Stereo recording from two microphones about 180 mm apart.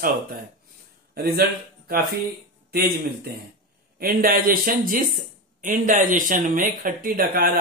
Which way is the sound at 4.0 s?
50° right (ahead or behind).